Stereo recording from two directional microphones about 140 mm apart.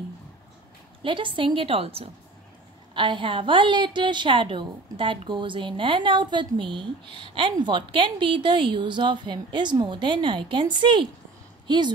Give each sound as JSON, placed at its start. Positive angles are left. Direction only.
{"t": 1.0, "sound": "a woman's voice", "side_deg": -35}